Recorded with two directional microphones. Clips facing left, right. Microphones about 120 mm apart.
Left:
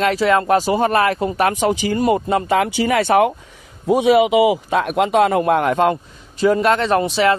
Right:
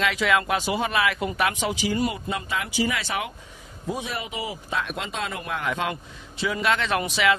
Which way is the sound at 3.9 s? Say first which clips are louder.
Left 18 dB; 70° left (ahead or behind).